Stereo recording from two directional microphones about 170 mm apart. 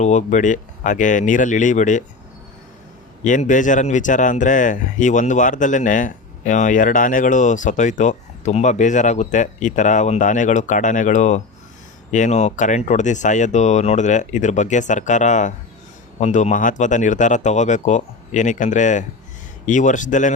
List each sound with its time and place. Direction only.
0.0 s speech: 45° left (ahead or behind)
3.2 s speech: 50° left (ahead or behind)